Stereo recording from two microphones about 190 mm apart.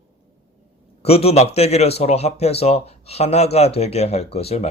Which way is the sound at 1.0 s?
30° left (ahead or behind).